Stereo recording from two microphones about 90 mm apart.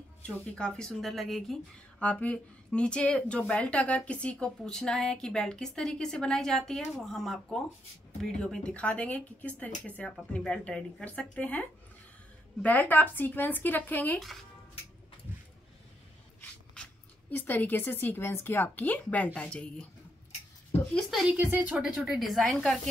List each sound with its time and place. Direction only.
0.6 s speech: 10° left (ahead or behind)
2.0 s speech: 15° left (ahead or behind)
12.6 s speech: 20° left (ahead or behind)
17.5 s speech: 20° left (ahead or behind)
21.1 s a woman's voice: 10° right (ahead or behind)
21.5 s speech: 20° right (ahead or behind)
21.7 s speech: 5° right (ahead or behind)